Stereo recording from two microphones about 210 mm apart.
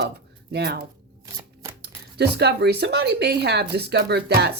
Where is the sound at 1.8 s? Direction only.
50° right (ahead or behind).